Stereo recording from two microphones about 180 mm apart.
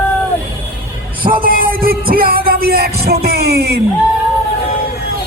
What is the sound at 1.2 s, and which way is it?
Music, 55° right (ahead or behind).